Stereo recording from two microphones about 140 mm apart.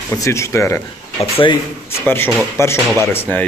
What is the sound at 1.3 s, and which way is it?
Speech, 35° left (ahead or behind).